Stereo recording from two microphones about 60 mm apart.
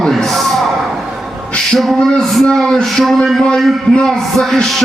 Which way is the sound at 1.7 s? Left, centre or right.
Centre.